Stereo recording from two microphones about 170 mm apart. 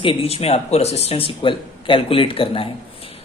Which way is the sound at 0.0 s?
35° left (ahead or behind).